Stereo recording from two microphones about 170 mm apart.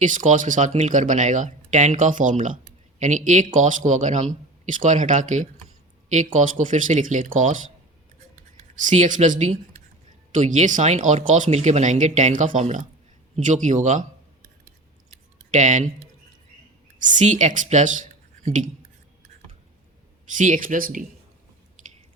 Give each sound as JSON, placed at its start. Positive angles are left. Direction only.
{"t": 0.0, "sound": "speech", "side_deg": -50}
{"t": 8.9, "sound": "speech", "side_deg": -45}
{"t": 15.5, "sound": "speech", "side_deg": -45}
{"t": 17.0, "sound": "speech", "side_deg": -45}
{"t": 20.3, "sound": "speech", "side_deg": -50}